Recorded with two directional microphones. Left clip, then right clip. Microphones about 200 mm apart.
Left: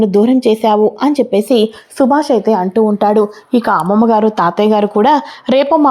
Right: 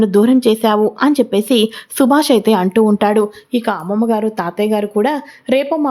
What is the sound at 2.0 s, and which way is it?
A woman's voice, 15° right (ahead or behind).